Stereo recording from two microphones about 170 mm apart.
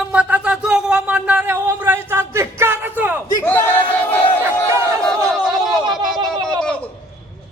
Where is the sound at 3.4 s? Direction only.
10° left (ahead or behind).